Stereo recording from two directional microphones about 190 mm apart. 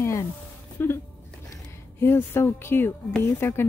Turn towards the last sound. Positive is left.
turn(degrees=10)  # may be behind; listen again after turning